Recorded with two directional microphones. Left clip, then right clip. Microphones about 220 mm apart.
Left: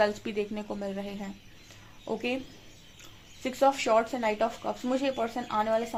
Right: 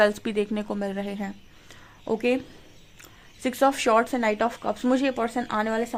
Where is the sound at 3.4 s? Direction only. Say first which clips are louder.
Right 3 dB; 45° right (ahead or behind).